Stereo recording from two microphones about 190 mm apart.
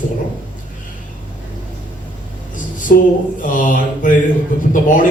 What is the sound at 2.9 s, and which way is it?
A man's voice, 50° left (ahead or behind).